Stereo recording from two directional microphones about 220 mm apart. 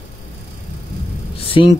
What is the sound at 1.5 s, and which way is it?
Speech, 25° left (ahead or behind).